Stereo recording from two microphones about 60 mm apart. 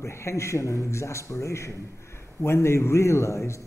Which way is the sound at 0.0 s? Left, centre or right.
Left.